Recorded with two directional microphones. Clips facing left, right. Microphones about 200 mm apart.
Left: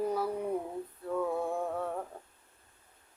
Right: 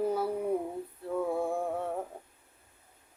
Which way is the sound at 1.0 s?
25° right (ahead or behind).